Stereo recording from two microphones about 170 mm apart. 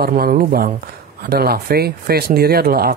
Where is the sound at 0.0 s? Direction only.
60° right (ahead or behind).